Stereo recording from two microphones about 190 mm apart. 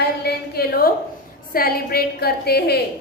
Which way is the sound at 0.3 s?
55° left (ahead or behind).